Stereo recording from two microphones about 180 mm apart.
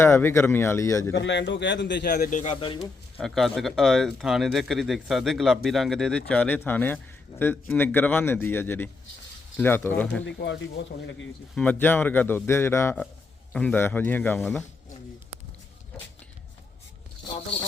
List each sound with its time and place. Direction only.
0.0 s a man's voice: 15° left (ahead or behind)
1.1 s a man's voice: 80° left
2.0 s speech: 50° left (ahead or behind)
2.4 s speech: 35° left (ahead or behind)
3.2 s a man's voice: centre (ahead or behind)
10.2 s a man's voice: 80° left
11.5 s a man's voice: 10° left (ahead or behind)